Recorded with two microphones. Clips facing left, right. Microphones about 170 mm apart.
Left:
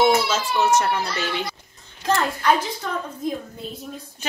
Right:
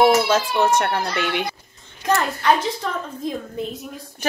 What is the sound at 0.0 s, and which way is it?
Speech, 60° right (ahead or behind).